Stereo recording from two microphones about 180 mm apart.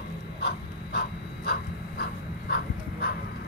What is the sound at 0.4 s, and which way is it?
Dog, 65° left (ahead or behind).